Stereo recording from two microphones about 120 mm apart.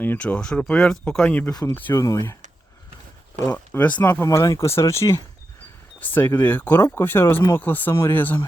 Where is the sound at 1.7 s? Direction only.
25° left (ahead or behind).